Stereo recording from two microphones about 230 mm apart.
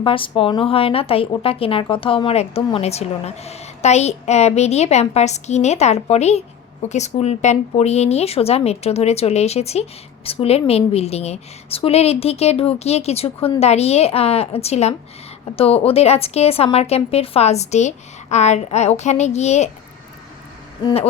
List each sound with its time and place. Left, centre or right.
0.0 s a woman's voice: left
20.8 s a woman's voice: left